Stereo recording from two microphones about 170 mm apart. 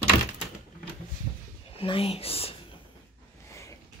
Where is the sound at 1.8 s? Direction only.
35° left (ahead or behind).